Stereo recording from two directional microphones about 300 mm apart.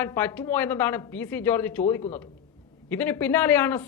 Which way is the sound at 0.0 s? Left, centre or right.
Centre.